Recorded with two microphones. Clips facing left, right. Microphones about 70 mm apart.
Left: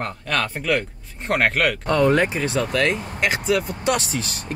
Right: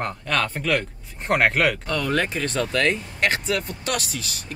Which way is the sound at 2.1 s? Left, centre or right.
Centre.